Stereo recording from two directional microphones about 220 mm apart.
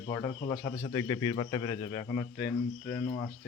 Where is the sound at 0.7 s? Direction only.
20° left (ahead or behind).